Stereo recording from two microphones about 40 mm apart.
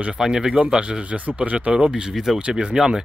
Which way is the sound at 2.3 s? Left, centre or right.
Right.